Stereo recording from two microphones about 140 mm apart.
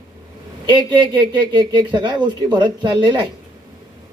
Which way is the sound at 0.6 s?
35° right (ahead or behind).